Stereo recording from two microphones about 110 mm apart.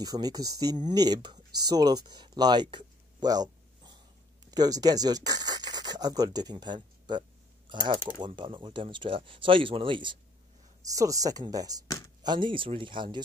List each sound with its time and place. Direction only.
0.0 s speech: 35° right (ahead or behind)
8.3 s speech: 50° right (ahead or behind)
10.8 s speech: 30° right (ahead or behind); by 13.2 s 45° right (ahead or behind)